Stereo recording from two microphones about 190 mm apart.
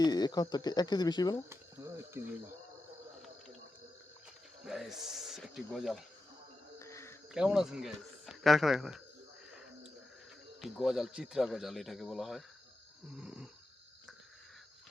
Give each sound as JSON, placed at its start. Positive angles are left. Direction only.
{"t": 0.0, "sound": "speech", "side_deg": 20}
{"t": 1.5, "sound": "speech", "side_deg": -15}
{"t": 4.6, "sound": "speech", "side_deg": 0}
{"t": 6.7, "sound": "cricket", "side_deg": 15}
{"t": 7.3, "sound": "speech", "side_deg": 0}
{"t": 10.6, "sound": "speech", "side_deg": 0}